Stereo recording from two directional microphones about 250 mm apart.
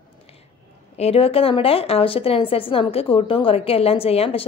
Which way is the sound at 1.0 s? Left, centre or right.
Left.